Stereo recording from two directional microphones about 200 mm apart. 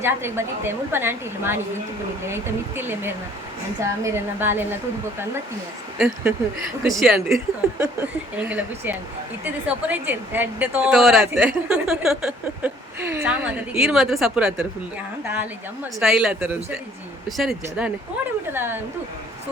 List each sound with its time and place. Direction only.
0.0 s a woman's voice: 10° right (ahead or behind)
6.0 s a woman's voice: 5° right (ahead or behind)
16.0 s a woman's voice: 5° right (ahead or behind)